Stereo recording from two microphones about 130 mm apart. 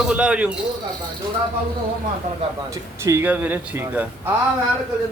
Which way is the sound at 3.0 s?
20° right (ahead or behind).